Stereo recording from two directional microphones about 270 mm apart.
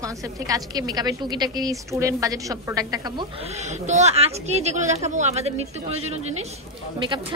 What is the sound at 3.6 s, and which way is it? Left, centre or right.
A woman's voice, right.